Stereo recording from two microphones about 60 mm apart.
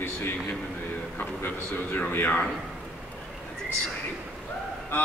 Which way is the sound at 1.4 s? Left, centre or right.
Left.